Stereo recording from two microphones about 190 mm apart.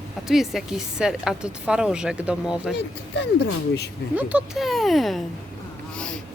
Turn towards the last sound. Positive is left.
turn(degrees=0)  # may be behind; listen again after turning